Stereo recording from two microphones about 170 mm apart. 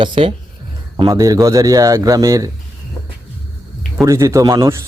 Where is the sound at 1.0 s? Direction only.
20° right (ahead or behind).